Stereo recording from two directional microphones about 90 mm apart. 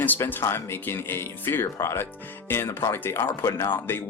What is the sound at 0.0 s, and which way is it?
Speech, 20° left (ahead or behind).